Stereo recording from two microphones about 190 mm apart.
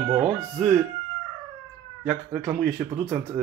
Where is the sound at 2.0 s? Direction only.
5° right (ahead or behind).